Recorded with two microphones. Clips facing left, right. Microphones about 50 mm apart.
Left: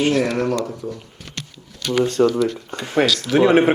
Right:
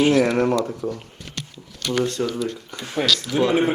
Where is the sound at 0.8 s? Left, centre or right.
Right.